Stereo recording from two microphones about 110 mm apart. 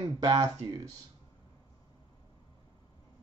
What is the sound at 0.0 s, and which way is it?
Speech, 35° right (ahead or behind).